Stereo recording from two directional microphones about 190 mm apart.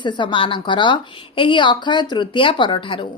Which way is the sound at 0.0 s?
25° left (ahead or behind).